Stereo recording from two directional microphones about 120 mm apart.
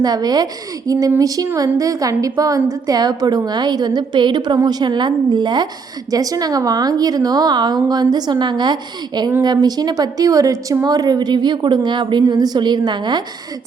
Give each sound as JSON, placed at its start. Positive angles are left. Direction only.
{"t": 0.0, "sound": "a woman's voice", "side_deg": -35}
{"t": 0.9, "sound": "child singing", "side_deg": -30}
{"t": 1.5, "sound": "a woman's voice", "side_deg": -30}